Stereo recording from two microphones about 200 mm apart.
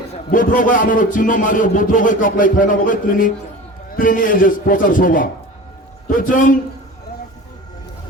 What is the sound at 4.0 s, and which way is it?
A man's voice, 45° left (ahead or behind).